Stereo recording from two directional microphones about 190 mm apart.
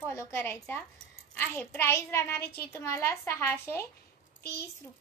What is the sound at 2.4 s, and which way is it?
Speech, 55° left (ahead or behind).